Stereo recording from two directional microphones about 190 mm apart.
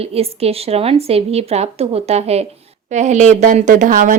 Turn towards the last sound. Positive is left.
turn(degrees=-45)  # may be behind; listen again after turning